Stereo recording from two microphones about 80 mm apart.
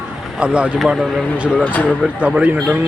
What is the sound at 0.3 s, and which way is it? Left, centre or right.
Speech, centre.